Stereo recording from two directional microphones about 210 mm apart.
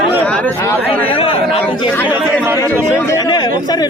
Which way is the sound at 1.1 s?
25° left (ahead or behind).